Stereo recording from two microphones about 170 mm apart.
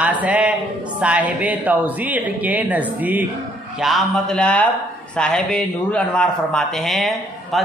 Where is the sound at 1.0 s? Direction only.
10° right (ahead or behind).